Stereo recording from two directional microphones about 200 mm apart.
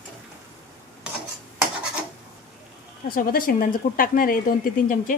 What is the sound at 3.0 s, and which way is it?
Speech, 45° left (ahead or behind).